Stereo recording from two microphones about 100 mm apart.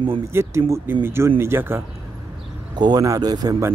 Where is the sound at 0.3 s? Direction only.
25° right (ahead or behind).